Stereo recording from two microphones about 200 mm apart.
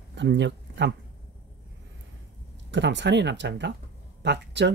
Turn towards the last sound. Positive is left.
turn(degrees=-60)  # may be behind; listen again after turning